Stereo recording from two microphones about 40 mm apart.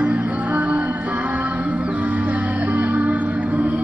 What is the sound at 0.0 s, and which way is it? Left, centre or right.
Music, right.